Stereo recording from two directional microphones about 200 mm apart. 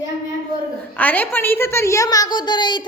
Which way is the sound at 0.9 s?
10° left (ahead or behind).